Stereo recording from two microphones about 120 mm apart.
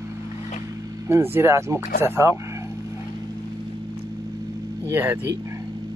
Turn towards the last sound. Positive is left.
turn(degrees=-15)  # may be behind; listen again after turning